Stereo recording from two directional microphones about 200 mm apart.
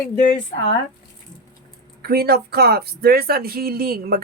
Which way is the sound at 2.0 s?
50° right (ahead or behind).